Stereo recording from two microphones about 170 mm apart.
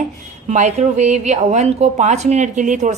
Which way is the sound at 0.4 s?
45° right (ahead or behind).